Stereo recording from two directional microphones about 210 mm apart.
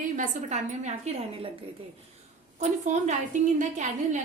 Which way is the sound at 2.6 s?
35° right (ahead or behind).